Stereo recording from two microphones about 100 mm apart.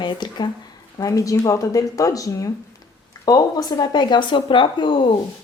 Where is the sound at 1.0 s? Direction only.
35° left (ahead or behind); by 5.0 s 55° left (ahead or behind).